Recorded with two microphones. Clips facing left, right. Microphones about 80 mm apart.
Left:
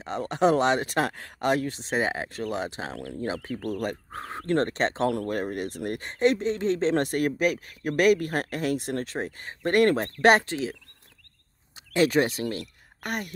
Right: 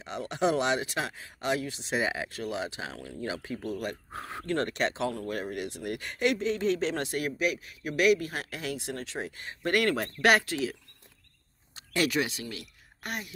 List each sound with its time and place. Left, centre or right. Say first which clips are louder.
0.0 s speech: left 5 dB; left
3.0 s speech: left 5 dB; left
7.0 s speech: left 6 dB; left
11.7 s a sound: left 6 dB; left
12.1 s speech: left 7 dB; left